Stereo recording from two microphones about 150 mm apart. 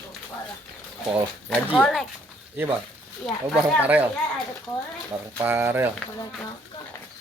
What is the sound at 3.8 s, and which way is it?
Speech, 10° right (ahead or behind).